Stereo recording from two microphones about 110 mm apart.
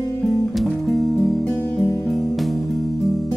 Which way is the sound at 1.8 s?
30° left (ahead or behind).